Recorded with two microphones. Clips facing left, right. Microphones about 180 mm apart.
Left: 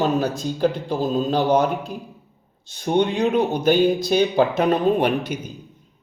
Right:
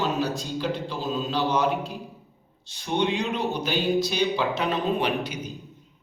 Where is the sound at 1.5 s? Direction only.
50° left (ahead or behind).